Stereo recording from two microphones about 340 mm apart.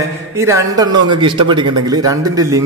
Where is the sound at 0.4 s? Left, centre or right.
Centre.